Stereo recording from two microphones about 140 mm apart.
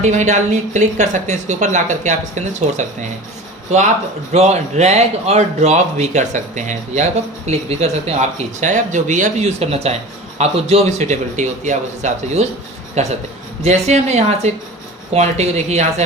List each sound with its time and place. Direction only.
0.0 s speech: 60° right (ahead or behind)
4.3 s speech: 55° right (ahead or behind)